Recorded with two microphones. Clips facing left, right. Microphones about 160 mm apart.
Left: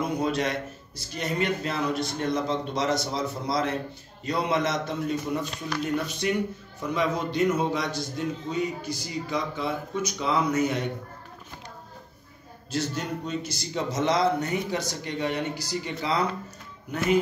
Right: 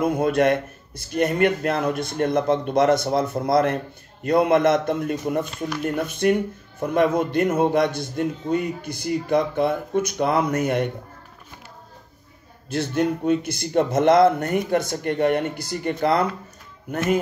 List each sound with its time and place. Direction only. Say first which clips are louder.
0.0 s speech: right 7 dB; 55° right (ahead or behind)
12.6 s speech: right 7 dB; 55° right (ahead or behind)